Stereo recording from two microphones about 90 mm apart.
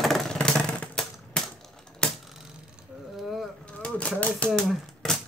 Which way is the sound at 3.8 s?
15° left (ahead or behind).